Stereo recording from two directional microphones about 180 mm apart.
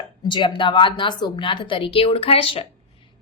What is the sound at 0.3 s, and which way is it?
A woman's voice, 25° left (ahead or behind).